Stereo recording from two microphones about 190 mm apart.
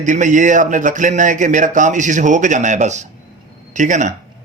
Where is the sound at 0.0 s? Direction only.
40° right (ahead or behind).